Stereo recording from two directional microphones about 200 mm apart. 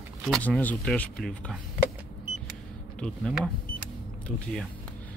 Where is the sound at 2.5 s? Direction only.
5° left (ahead or behind).